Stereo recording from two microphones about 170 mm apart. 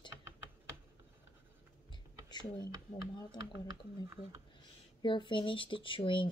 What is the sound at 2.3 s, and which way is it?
Speech, 25° left (ahead or behind).